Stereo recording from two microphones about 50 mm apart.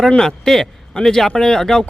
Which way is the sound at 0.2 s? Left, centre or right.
Centre.